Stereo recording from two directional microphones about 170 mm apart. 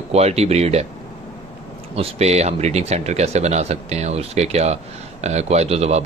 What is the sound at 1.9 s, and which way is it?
Speech, 35° right (ahead or behind).